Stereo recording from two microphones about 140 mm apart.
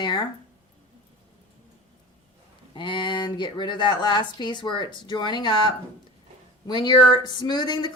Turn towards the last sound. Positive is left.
turn(degrees=30)  # may be behind; listen again after turning